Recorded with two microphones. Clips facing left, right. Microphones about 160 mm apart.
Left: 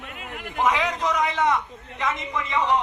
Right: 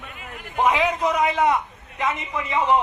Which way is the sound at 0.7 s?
10° right (ahead or behind).